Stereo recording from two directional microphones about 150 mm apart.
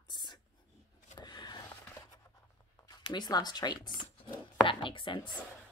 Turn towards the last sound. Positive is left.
turn(degrees=30)  # may be behind; listen again after turning